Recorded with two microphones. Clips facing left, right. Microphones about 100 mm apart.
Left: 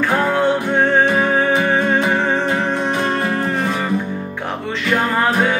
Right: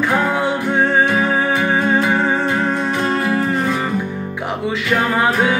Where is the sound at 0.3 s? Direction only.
15° right (ahead or behind).